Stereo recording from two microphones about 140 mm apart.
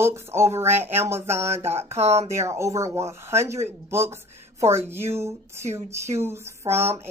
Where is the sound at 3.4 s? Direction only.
50° right (ahead or behind).